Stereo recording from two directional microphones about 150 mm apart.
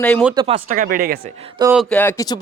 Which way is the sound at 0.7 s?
70° right (ahead or behind).